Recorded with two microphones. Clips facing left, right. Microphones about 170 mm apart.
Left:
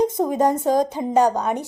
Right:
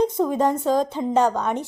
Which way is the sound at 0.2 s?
35° left (ahead or behind).